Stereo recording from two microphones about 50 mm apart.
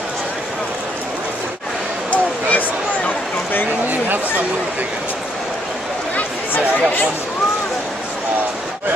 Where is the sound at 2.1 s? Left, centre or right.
Left.